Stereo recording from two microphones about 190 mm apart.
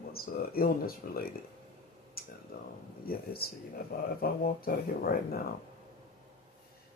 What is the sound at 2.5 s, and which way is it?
Speech, 55° left (ahead or behind).